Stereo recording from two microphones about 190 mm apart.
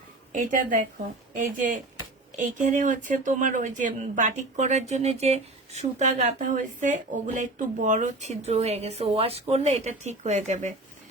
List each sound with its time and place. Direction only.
0.3 s a woman's voice: 45° right (ahead or behind)